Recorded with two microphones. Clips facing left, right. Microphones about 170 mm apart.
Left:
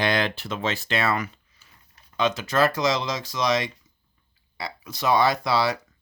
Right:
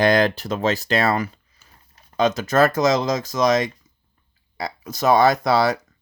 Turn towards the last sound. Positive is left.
turn(degrees=-45)  # may be behind; listen again after turning